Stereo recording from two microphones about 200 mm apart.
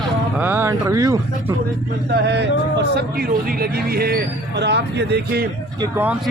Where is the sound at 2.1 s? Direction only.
55° right (ahead or behind).